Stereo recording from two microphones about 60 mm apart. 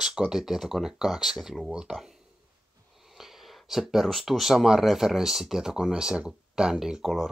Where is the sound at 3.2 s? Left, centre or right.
Centre.